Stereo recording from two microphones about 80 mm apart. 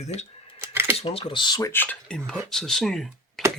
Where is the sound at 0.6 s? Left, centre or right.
Right.